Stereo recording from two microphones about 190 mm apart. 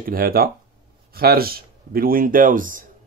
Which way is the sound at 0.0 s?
50° right (ahead or behind).